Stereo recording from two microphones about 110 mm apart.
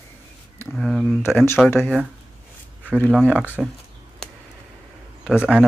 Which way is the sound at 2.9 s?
10° left (ahead or behind).